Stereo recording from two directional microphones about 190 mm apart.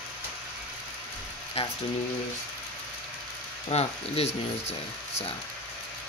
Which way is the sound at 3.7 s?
35° left (ahead or behind).